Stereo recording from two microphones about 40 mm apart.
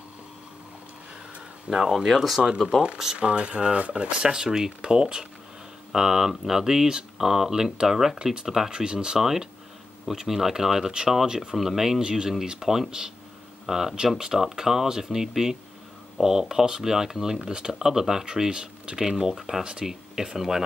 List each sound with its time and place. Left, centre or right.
1.7 s speech: centre
3.2 s speech: right; by 20.6 s centre